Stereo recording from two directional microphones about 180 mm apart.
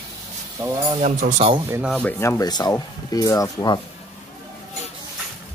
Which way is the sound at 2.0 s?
15° left (ahead or behind).